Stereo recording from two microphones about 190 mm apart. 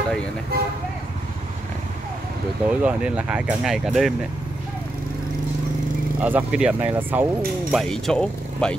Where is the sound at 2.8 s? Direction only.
5° right (ahead or behind).